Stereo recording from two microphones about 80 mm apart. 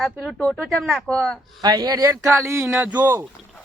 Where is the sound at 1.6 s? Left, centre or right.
Right.